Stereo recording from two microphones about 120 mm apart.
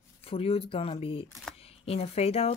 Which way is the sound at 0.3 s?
50° left (ahead or behind).